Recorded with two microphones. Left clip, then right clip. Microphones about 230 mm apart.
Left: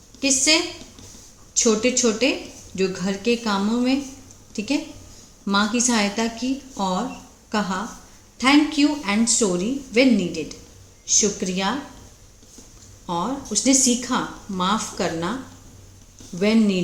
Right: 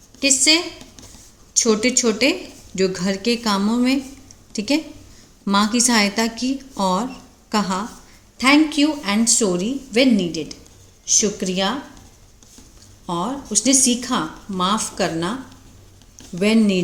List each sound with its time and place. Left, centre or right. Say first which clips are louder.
0.2 s a woman's voice: right 2 dB; right
13.1 s speech: right 1 dB; right
16.4 s a woman's voice: right 2 dB; right